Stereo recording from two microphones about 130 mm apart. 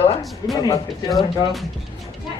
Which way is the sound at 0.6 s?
30° left (ahead or behind).